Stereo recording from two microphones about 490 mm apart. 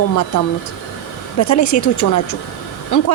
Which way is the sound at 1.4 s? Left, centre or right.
Left.